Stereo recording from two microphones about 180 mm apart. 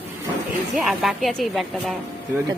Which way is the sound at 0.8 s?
Centre (ahead or behind).